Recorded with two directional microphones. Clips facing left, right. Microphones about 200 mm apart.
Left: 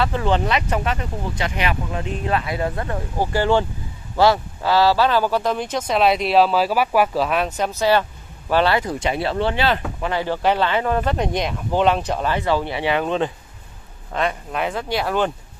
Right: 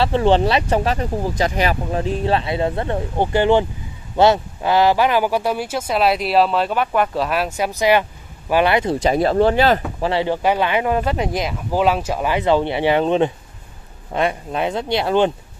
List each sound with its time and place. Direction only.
0.0 s speech: 30° right (ahead or behind)
9.0 s speech: 40° right (ahead or behind)
9.9 s speech: 30° right (ahead or behind)
10.2 s speech: 15° right (ahead or behind)